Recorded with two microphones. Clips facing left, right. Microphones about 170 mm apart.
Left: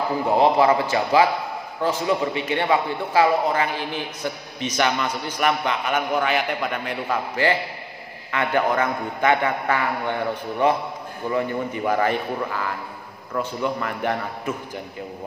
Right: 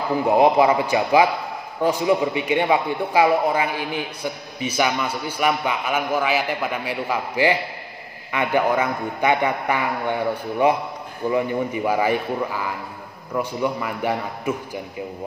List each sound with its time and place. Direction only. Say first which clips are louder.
0.4 s a man's voice: right 1 dB; 15° right (ahead or behind)